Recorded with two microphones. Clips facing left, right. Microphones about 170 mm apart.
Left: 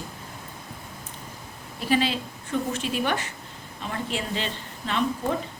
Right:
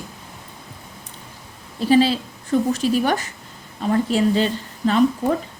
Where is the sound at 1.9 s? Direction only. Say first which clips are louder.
Right 8 dB; 35° right (ahead or behind).